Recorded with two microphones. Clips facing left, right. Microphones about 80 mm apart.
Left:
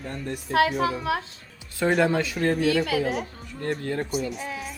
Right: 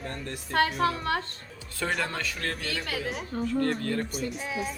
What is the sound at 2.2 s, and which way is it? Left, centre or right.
Speech, centre.